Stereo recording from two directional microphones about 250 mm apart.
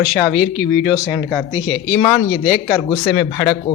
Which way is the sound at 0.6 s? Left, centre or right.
Centre.